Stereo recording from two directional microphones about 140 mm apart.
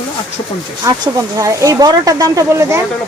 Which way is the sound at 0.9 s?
25° right (ahead or behind).